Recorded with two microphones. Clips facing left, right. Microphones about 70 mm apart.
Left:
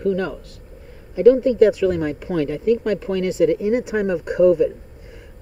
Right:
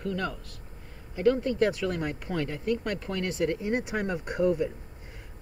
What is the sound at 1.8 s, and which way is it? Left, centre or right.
Speech, left.